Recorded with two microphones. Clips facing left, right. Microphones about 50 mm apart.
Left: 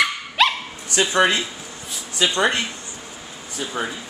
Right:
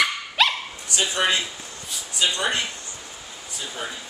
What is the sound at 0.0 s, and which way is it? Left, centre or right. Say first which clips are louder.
Dog: left 2 dB; centre.